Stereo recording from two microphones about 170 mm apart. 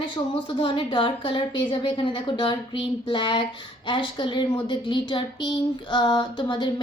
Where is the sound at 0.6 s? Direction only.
30° left (ahead or behind).